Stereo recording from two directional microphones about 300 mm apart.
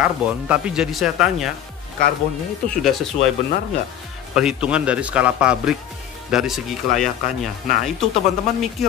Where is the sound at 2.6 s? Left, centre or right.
Centre.